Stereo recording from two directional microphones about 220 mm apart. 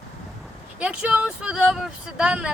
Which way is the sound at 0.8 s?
5° right (ahead or behind).